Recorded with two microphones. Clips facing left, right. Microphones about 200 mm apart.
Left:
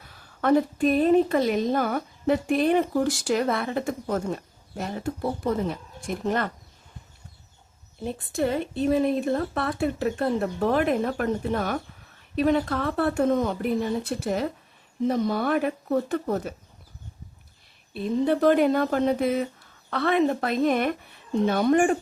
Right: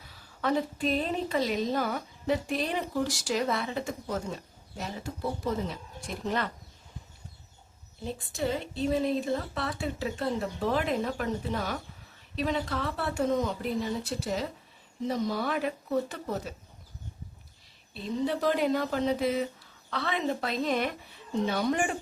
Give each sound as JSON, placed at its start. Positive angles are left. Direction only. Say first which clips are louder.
{"t": 0.0, "sound": "a woman's voice", "louder": "left 6 dB", "side_deg": 55}
{"t": 8.0, "sound": "a woman's voice", "louder": "left 5 dB", "side_deg": 55}
{"t": 17.9, "sound": "a woman's voice", "louder": "left 7 dB", "side_deg": 55}